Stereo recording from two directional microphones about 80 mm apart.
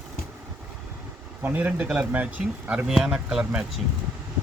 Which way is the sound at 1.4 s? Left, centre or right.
Centre.